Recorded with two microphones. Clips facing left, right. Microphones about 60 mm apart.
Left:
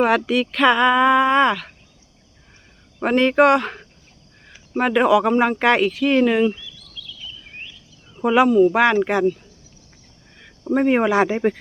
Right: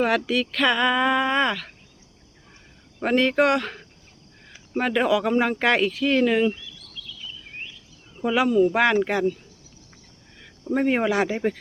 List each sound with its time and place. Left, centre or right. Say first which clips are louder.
0.0 s speech: left 4 dB; centre
3.0 s speech: left 4 dB; centre
8.2 s speech: left 6 dB; left
8.4 s speech: left 4 dB; centre
10.7 s speech: left 4 dB; centre